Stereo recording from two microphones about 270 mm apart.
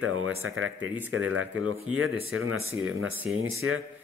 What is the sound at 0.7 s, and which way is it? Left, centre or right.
Speech, centre.